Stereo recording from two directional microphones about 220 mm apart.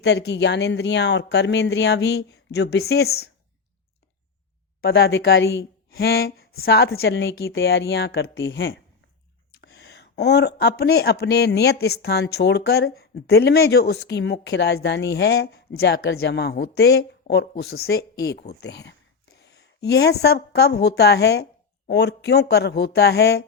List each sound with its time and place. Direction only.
0.0 s speech: 50° left (ahead or behind)
4.8 s a woman's voice: 45° left (ahead or behind)